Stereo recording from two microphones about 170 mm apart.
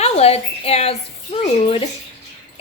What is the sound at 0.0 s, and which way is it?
Speech, 35° left (ahead or behind).